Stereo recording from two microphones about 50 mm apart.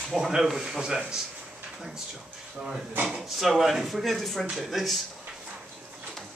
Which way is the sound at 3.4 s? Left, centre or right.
Centre.